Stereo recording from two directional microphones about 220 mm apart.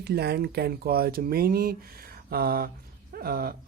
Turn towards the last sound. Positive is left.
turn(degrees=-45)  # may be behind; listen again after turning